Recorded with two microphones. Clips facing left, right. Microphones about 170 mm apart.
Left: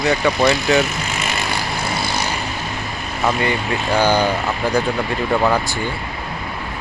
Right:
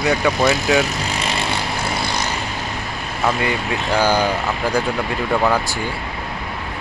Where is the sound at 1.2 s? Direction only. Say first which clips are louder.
Right 1 dB; 30° right (ahead or behind).